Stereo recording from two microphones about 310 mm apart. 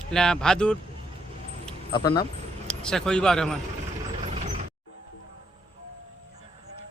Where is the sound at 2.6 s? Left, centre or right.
Centre.